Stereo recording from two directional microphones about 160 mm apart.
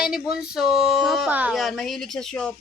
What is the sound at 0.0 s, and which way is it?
Speech, 5° right (ahead or behind).